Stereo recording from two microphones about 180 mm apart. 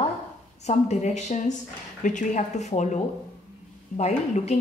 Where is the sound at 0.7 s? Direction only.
40° left (ahead or behind).